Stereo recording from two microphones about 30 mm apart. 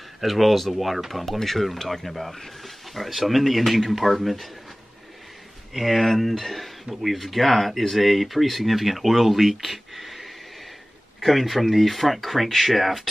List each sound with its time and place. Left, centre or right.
0.2 s speech: centre
5.7 s speech: centre
11.2 s speech: centre